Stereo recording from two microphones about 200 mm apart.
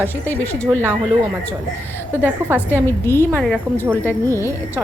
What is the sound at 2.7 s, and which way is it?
A woman's voice, 10° left (ahead or behind).